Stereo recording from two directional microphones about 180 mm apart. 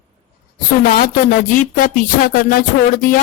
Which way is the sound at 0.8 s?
50° left (ahead or behind).